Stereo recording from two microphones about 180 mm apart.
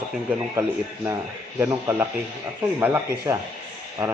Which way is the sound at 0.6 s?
15° right (ahead or behind).